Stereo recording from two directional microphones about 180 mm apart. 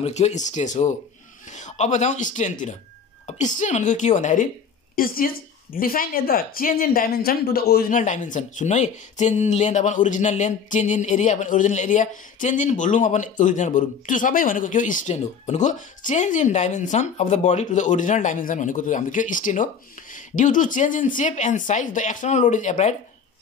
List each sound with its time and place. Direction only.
0.0 s a woman's voice: 40° left (ahead or behind)
4.9 s a woman's voice: 55° left (ahead or behind)